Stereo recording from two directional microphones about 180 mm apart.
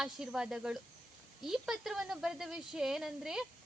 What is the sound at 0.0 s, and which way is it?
A woman's voice, 5° right (ahead or behind).